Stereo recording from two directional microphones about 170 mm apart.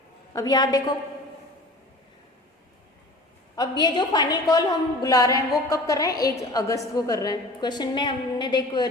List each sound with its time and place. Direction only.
0.3 s a woman's voice: 25° left (ahead or behind)
3.5 s a woman's voice: 25° left (ahead or behind)